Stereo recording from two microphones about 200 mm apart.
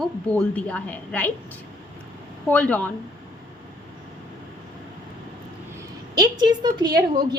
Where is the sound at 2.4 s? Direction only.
5° left (ahead or behind).